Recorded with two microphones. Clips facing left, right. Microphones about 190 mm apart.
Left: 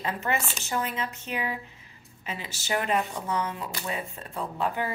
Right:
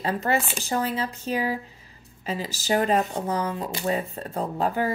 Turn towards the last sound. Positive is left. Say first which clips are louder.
# right 4 dB
turn(degrees=-40)  # may be behind; listen again after turning